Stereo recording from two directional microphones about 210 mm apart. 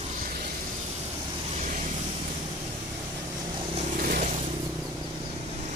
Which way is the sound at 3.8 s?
40° right (ahead or behind).